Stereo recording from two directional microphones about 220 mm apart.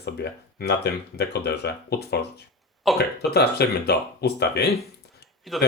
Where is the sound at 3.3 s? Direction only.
45° left (ahead or behind).